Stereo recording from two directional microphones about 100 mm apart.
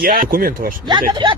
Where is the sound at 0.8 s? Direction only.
50° right (ahead or behind).